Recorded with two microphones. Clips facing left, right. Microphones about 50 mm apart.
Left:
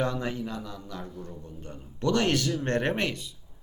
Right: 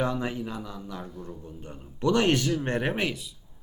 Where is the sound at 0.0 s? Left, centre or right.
Centre.